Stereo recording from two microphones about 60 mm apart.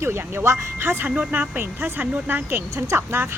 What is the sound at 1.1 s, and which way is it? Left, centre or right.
Speech, right.